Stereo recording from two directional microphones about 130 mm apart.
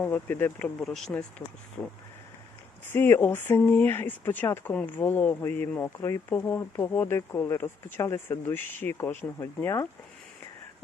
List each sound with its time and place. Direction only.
0.0 s speech: 15° left (ahead or behind)
0.8 s speech: 5° left (ahead or behind)
2.9 s speech: 15° left (ahead or behind)